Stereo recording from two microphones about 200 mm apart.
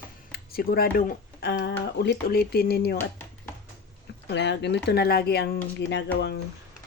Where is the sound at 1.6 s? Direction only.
60° left (ahead or behind).